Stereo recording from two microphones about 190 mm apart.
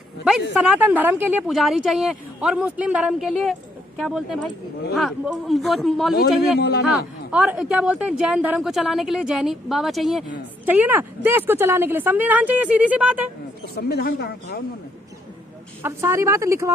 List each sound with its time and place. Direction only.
0.5 s speech: 5° right (ahead or behind)
6.6 s speech: 60° left (ahead or behind)
7.3 s speech: 5° right (ahead or behind)
13.7 s speech: 55° left (ahead or behind)
15.8 s speech: 15° right (ahead or behind)